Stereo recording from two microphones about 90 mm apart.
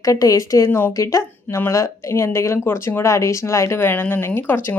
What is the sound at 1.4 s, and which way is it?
Speech, 20° left (ahead or behind).